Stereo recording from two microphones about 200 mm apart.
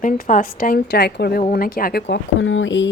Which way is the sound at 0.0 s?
40° left (ahead or behind).